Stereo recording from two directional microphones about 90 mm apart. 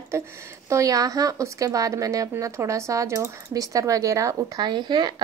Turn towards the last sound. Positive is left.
turn(degrees=-55)  # may be behind; listen again after turning